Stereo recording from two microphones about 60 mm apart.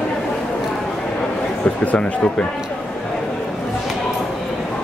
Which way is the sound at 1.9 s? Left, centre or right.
Centre.